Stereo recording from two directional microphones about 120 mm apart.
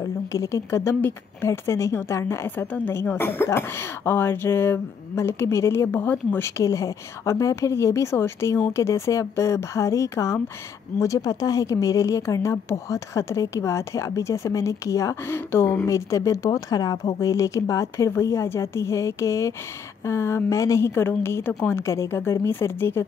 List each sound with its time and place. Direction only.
0.3 s a woman's voice: 25° left (ahead or behind)